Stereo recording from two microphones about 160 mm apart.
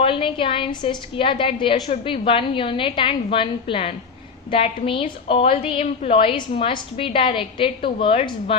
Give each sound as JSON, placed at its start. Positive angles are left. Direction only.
{"t": 0.0, "sound": "a woman's voice", "side_deg": 35}